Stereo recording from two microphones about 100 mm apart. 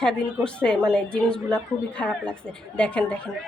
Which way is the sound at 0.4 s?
10° left (ahead or behind).